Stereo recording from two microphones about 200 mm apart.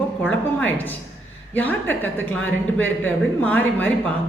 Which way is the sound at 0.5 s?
10° left (ahead or behind).